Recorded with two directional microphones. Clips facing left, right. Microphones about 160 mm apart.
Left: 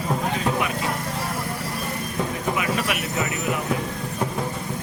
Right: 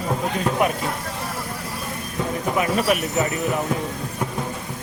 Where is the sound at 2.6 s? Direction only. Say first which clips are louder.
Right 5 dB; 40° right (ahead or behind).